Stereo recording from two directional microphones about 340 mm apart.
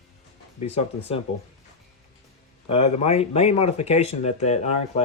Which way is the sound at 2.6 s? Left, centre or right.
Centre.